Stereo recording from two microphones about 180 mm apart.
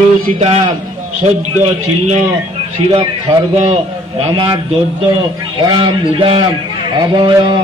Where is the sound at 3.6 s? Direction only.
30° right (ahead or behind).